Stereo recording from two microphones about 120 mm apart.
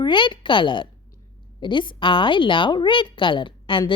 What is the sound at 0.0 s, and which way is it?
A woman's voice, 40° left (ahead or behind).